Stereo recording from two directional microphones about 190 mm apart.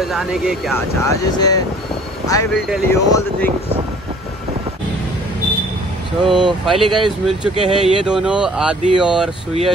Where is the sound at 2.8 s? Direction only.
15° left (ahead or behind).